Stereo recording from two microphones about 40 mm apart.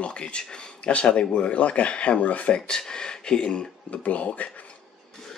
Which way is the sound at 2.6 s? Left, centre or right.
Centre.